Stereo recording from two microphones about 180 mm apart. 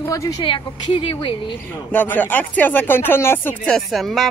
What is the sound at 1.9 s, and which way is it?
Speech, 10° left (ahead or behind).